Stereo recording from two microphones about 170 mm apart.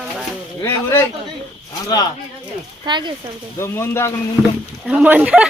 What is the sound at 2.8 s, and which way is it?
Speech, 25° right (ahead or behind).